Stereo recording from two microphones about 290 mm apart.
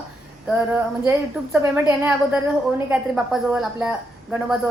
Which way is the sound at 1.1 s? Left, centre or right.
Centre.